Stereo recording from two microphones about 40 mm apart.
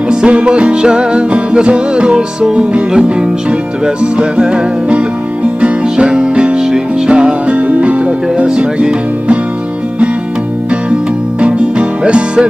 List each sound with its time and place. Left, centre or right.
0.1 s music: right
7.5 s music: right
12.0 s music: right